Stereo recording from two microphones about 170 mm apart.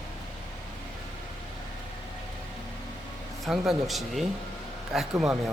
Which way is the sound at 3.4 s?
Centre (ahead or behind).